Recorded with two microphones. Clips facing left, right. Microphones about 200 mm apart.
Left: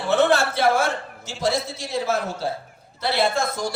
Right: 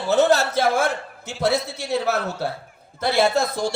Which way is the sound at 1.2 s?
60° right (ahead or behind).